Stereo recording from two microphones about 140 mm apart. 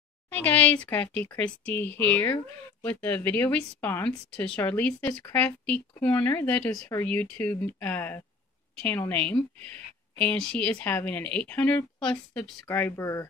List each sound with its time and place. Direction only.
0.3 s speech: 10° left (ahead or behind)